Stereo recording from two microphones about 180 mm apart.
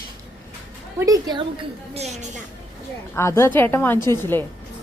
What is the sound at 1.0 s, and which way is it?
Speech, 20° right (ahead or behind).